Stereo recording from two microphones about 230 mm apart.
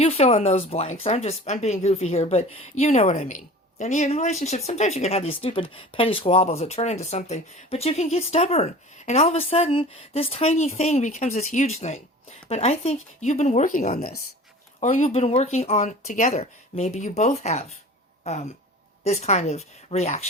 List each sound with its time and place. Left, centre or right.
0.0 s speech: left
18.2 s a sound: left
19.0 s speech: left